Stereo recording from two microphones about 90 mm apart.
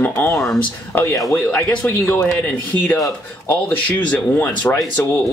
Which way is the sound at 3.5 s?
20° left (ahead or behind).